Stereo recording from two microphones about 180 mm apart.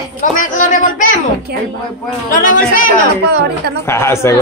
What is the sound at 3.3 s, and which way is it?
Speech, 65° right (ahead or behind).